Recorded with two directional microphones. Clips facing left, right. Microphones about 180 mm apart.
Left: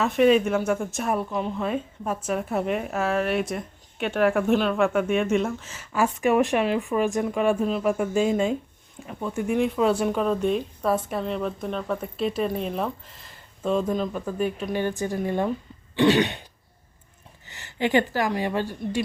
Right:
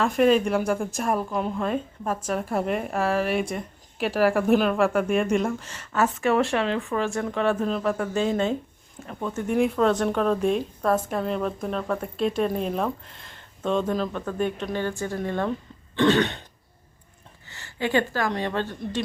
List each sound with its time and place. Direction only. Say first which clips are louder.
0.0 s a woman's voice: left 1 dB; centre (ahead or behind); by 16.4 s 15° left (ahead or behind)
17.5 s a sound: left 2 dB; 20° left (ahead or behind)
18.1 s speech: left 1 dB; 15° left (ahead or behind)